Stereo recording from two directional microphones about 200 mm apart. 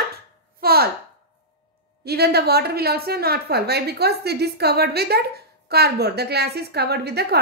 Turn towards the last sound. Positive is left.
turn(degrees=-55)  # may be behind; listen again after turning